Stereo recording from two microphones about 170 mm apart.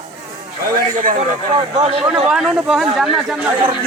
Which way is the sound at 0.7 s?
55° right (ahead or behind).